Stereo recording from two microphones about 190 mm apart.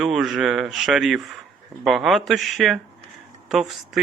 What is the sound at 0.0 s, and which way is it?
Speech, centre (ahead or behind).